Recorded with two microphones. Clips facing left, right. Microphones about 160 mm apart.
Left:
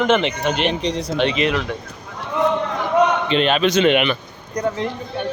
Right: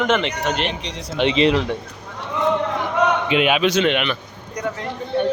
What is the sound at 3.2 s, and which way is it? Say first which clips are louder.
Speech: even; 10° right (ahead or behind).